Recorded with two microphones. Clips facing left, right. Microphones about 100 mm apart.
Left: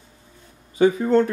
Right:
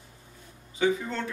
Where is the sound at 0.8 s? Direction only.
45° left (ahead or behind).